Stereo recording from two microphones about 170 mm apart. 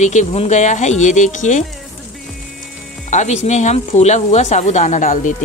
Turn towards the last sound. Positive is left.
turn(degrees=50)  # may be behind; listen again after turning